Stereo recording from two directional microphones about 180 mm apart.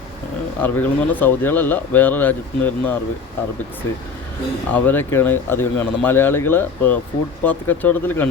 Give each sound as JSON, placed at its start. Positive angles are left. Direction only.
{"t": 0.6, "sound": "speech", "side_deg": 10}
{"t": 4.7, "sound": "speech", "side_deg": 10}